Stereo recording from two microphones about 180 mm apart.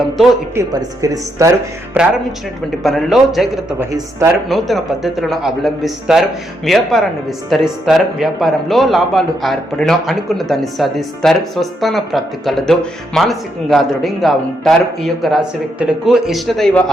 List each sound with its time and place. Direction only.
0.5 s speech: 20° right (ahead or behind)
1.9 s speech: 5° right (ahead or behind)